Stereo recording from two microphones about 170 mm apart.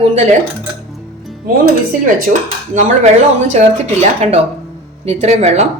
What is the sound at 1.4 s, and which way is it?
Speech, 55° right (ahead or behind).